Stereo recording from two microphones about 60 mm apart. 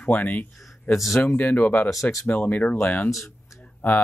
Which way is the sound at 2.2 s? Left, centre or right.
Left.